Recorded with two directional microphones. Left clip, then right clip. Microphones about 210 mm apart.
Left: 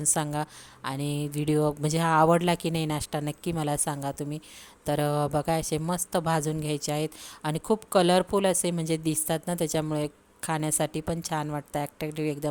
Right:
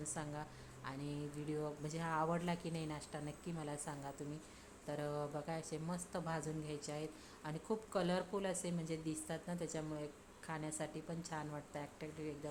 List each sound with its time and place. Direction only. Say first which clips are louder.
0.0 s a woman's voice: left 17 dB; 50° left (ahead or behind)